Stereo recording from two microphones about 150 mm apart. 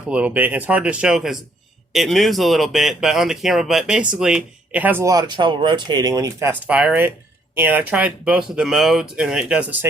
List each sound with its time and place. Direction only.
0.1 s speech: 10° right (ahead or behind)